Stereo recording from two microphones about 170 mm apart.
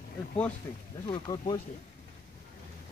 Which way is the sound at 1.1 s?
25° left (ahead or behind).